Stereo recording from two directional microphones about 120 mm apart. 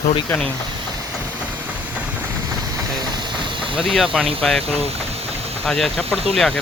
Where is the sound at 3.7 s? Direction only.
Centre (ahead or behind).